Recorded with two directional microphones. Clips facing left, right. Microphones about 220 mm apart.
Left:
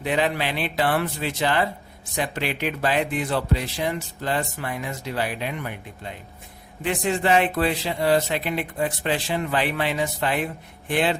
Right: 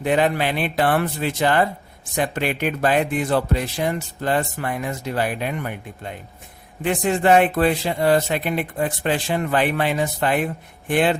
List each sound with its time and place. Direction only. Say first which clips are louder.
0.0 s speech: right 4 dB; 50° right (ahead or behind)